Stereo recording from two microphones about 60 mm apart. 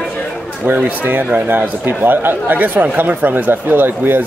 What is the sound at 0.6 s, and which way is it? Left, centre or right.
A man's voice, right.